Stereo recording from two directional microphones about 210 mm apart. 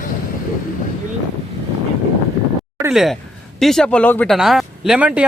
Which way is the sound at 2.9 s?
Centre (ahead or behind).